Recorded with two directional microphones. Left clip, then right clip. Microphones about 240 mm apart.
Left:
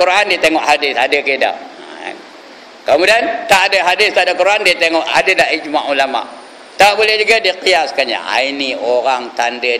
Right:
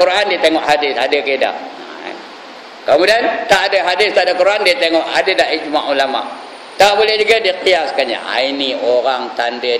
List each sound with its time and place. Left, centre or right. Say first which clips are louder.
0.0 s a man's voice: left 1 dB; left
2.9 s a man's voice: even; left